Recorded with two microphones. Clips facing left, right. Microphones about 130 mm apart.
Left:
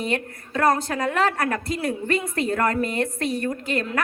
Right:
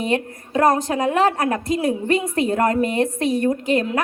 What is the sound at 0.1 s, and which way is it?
A woman's voice, 20° right (ahead or behind).